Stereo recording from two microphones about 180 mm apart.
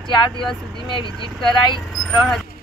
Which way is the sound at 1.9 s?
Centre (ahead or behind).